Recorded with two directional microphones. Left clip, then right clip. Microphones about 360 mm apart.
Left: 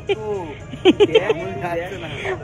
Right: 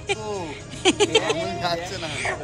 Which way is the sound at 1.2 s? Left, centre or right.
Right.